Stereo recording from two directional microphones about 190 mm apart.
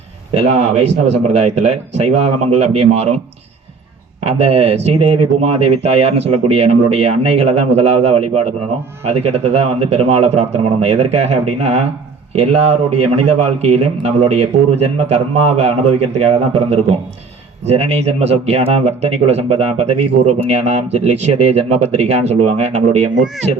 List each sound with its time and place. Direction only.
0.3 s speech: 35° right (ahead or behind)
4.3 s speech: 35° right (ahead or behind)